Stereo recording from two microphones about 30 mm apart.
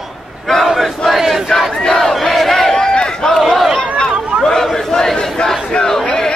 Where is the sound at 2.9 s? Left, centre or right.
Left.